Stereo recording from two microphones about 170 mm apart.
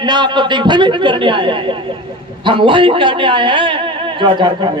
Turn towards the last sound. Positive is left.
turn(degrees=-25)  # may be behind; listen again after turning